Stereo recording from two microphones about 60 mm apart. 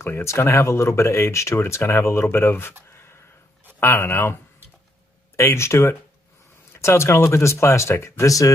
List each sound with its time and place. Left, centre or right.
0.0 s speech: left
2.9 s a sound: left
3.8 s speech: left
8.3 s speech: left